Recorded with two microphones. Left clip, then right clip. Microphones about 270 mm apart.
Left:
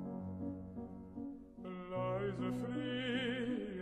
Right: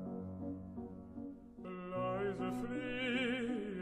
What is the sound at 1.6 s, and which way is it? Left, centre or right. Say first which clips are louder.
Music: right 1 dB; centre.